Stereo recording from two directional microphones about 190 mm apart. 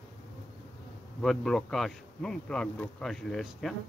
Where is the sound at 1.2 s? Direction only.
Centre (ahead or behind).